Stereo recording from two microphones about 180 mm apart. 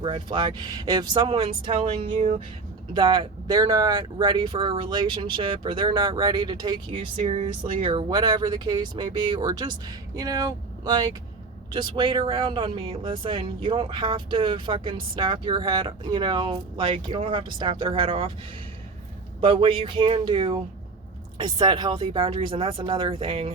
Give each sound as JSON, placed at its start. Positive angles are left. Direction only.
{"t": 0.0, "sound": "speech", "side_deg": -30}
{"t": 2.9, "sound": "speech", "side_deg": -25}
{"t": 19.4, "sound": "speech", "side_deg": -30}